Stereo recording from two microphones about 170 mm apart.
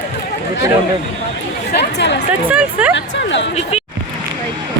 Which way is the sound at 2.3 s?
10° right (ahead or behind).